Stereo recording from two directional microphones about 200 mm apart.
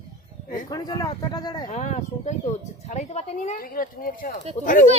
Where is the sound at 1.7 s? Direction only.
35° left (ahead or behind).